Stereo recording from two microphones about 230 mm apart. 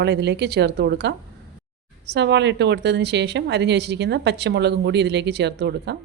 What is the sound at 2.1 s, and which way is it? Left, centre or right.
A woman's voice, right.